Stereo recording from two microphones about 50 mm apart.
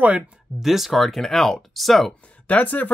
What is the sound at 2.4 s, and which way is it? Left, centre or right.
Speech, left.